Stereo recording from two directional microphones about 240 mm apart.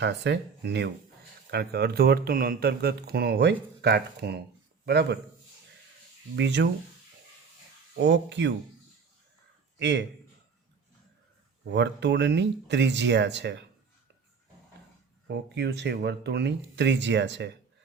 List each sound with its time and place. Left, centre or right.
0.0 s speech: right
6.3 s speech: right
8.0 s speech: right
9.7 s a man's voice: right
11.7 s speech: right
15.3 s speech: right